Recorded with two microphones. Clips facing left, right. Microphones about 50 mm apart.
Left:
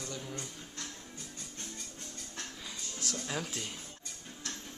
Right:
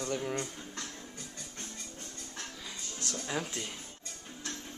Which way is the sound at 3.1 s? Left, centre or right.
Centre.